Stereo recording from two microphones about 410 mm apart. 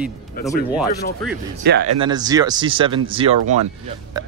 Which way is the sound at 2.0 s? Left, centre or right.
Centre.